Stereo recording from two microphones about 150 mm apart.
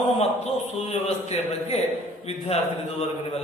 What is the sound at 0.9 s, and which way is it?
Speech, 45° left (ahead or behind).